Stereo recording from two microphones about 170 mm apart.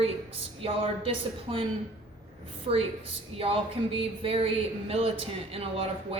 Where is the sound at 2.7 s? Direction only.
35° right (ahead or behind).